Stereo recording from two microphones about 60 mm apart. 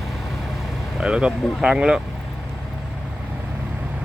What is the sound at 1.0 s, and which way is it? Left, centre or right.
Speech, centre.